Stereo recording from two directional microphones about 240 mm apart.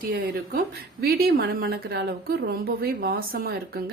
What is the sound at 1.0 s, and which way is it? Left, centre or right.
Speech, right.